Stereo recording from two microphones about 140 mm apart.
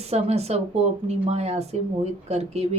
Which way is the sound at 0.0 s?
50° right (ahead or behind).